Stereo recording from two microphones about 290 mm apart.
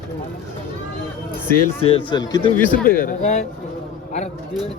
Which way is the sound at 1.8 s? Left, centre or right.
Centre.